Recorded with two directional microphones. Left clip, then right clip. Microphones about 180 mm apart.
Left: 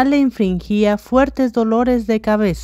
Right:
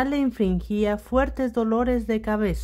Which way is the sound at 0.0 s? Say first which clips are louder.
Left 8 dB; 30° left (ahead or behind).